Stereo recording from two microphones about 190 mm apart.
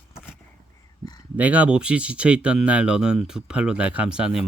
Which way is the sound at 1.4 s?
10° right (ahead or behind).